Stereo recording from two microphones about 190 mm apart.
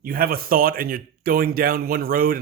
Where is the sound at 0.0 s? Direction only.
50° right (ahead or behind).